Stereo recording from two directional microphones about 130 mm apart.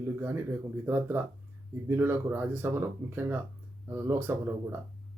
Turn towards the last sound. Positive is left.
turn(degrees=-15)  # may be behind; listen again after turning